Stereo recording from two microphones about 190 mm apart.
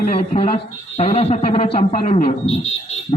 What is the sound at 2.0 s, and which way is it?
Speech, 45° left (ahead or behind).